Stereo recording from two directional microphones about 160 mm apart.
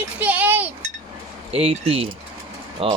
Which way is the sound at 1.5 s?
40° right (ahead or behind).